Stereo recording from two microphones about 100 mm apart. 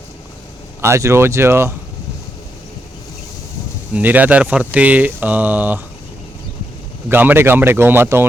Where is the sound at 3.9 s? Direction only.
15° right (ahead or behind).